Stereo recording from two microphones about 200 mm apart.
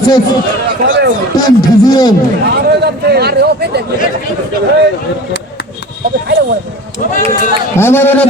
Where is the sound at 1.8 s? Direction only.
20° left (ahead or behind).